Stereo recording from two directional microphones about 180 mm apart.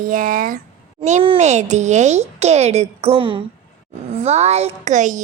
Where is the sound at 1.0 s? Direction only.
35° right (ahead or behind).